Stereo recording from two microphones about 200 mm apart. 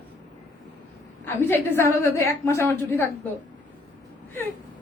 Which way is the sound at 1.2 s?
10° left (ahead or behind).